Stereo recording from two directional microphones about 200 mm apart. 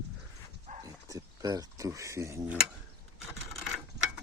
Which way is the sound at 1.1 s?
20° right (ahead or behind).